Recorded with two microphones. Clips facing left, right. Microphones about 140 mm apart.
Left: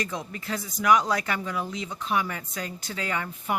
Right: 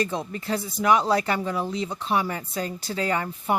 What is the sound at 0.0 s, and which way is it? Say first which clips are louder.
Speech: right 5 dB; 30° right (ahead or behind).